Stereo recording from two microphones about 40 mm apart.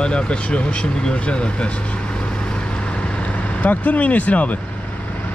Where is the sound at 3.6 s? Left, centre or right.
Left.